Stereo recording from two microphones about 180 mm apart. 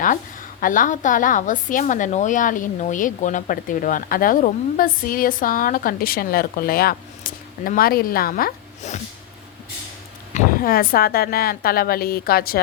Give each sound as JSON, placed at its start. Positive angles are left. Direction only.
{"t": 0.6, "sound": "a woman's voice", "side_deg": 50}
{"t": 10.3, "sound": "a woman's voice", "side_deg": 50}